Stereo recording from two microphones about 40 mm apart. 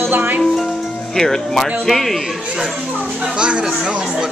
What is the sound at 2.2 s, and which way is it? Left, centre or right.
Speech, centre.